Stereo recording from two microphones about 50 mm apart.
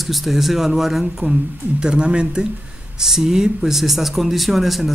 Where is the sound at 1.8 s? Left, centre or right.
Centre.